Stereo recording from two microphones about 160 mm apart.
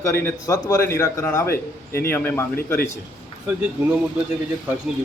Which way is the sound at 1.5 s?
70° left (ahead or behind).